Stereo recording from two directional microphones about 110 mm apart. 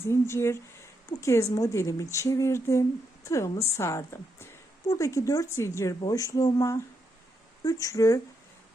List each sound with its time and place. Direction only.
0.0 s speech: 25° left (ahead or behind)